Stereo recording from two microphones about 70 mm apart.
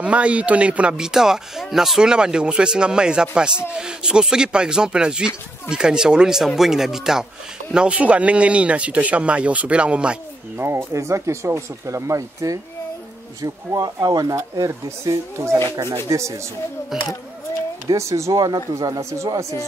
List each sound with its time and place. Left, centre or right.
0.0 s speech: centre
10.6 s speech: right
16.1 s speech: right
16.9 s a sound: centre
17.9 s speech: right
18.4 s speech: right